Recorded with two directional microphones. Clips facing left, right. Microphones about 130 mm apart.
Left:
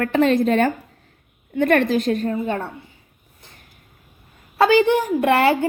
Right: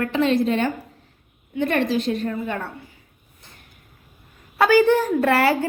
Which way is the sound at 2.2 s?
30° left (ahead or behind).